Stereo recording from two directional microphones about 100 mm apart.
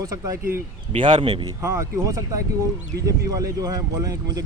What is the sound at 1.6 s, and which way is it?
Speech, 30° right (ahead or behind).